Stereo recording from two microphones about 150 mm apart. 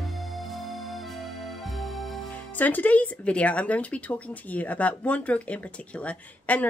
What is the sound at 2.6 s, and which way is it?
Speech, 10° left (ahead or behind).